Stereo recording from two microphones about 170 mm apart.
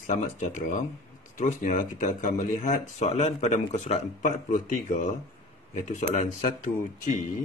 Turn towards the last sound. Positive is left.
turn(degrees=50)  # may be behind; listen again after turning